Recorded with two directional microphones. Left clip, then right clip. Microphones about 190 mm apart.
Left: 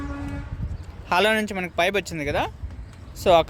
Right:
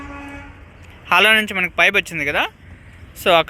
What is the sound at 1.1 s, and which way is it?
Speech, 5° left (ahead or behind).